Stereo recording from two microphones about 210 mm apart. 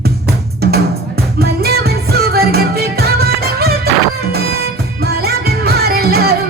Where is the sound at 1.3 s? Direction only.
50° right (ahead or behind).